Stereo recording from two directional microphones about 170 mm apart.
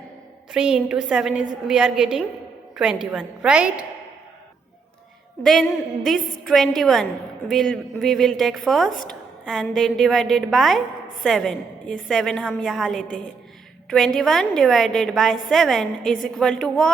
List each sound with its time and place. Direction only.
0.5 s a woman's voice: 5° right (ahead or behind)
5.4 s a woman's voice: centre (ahead or behind)